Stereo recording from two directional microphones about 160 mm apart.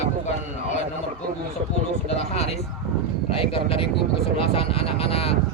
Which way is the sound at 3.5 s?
35° left (ahead or behind).